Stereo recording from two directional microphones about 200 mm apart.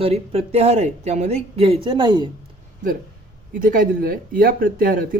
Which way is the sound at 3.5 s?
45° right (ahead or behind).